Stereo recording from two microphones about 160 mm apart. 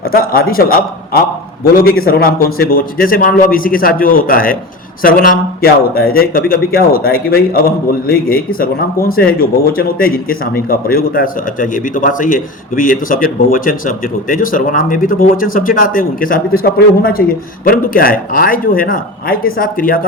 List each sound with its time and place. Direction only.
0.1 s speech: 65° left (ahead or behind)